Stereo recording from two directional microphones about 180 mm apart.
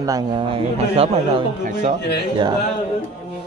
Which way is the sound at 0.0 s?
20° right (ahead or behind).